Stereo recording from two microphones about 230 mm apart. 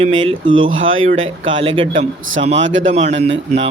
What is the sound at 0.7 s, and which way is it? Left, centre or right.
Speech, right.